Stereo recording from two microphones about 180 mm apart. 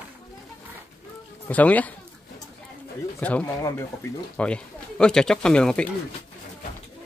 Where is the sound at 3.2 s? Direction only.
10° left (ahead or behind).